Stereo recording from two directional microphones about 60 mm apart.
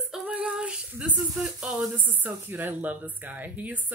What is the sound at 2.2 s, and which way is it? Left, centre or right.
Speech, right.